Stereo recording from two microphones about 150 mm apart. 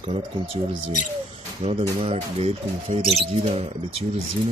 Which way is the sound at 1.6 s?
40° right (ahead or behind).